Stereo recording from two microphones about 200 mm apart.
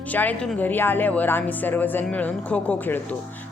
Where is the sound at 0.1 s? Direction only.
10° left (ahead or behind).